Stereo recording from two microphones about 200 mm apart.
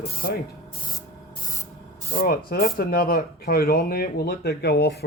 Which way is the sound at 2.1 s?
50° left (ahead or behind).